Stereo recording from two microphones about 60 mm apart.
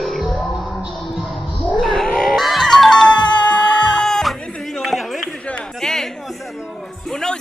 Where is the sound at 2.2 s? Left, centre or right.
Centre.